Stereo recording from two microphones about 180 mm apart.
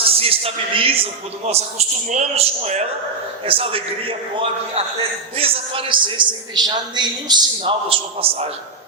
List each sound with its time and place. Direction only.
0.0 s speech: 30° right (ahead or behind)
5.4 s a man's voice: 30° right (ahead or behind)